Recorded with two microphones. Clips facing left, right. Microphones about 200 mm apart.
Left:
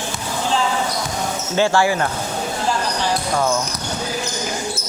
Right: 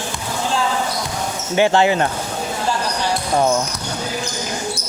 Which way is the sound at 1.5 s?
20° right (ahead or behind).